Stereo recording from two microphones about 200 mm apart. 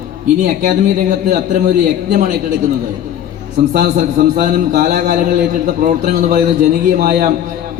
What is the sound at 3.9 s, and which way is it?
A man's voice, 40° right (ahead or behind).